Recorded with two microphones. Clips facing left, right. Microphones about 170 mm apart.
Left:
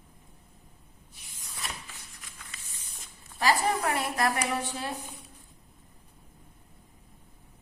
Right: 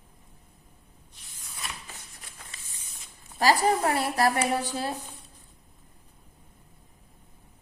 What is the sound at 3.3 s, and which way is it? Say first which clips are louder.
A woman's voice: right 4 dB; 40° right (ahead or behind).